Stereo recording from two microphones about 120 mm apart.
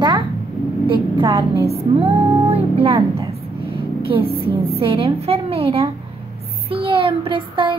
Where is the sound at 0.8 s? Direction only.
45° right (ahead or behind).